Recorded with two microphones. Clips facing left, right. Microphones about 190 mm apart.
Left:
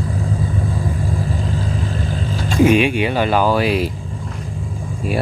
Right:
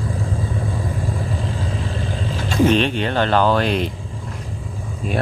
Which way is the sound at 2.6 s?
10° left (ahead or behind).